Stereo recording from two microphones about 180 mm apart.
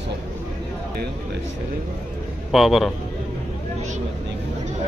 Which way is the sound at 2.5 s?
Centre (ahead or behind).